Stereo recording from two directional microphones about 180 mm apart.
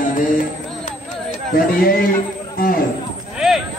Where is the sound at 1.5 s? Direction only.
55° left (ahead or behind).